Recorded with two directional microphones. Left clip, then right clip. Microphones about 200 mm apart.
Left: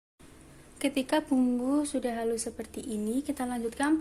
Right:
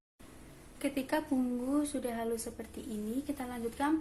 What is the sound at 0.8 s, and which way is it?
A woman's voice, 40° left (ahead or behind).